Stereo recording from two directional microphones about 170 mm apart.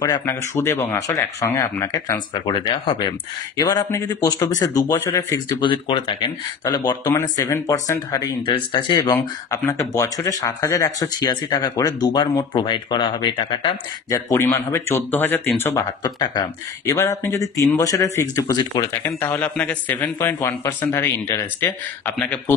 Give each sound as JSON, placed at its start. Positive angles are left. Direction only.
{"t": 0.0, "sound": "speech", "side_deg": 20}
{"t": 14.1, "sound": "speech", "side_deg": 15}